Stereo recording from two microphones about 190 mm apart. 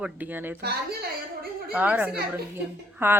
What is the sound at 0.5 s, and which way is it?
Speech, 55° right (ahead or behind).